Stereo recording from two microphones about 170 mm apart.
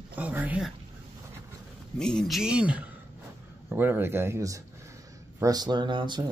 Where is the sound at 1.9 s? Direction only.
5° left (ahead or behind).